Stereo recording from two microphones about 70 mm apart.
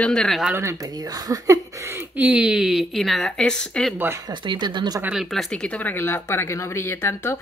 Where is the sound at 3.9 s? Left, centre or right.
Right.